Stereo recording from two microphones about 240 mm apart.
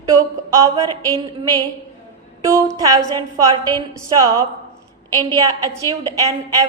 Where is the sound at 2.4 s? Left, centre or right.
Centre.